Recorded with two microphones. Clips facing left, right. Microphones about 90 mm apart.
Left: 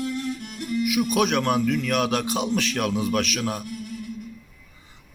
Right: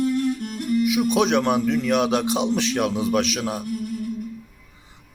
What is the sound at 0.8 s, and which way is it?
Speech, 30° right (ahead or behind).